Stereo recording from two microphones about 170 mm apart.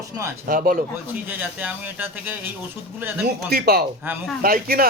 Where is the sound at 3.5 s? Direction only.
65° right (ahead or behind).